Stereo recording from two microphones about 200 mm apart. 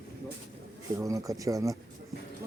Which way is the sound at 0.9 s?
15° right (ahead or behind).